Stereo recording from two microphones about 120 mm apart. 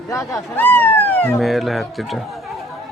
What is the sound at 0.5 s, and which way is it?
Speech, 15° left (ahead or behind).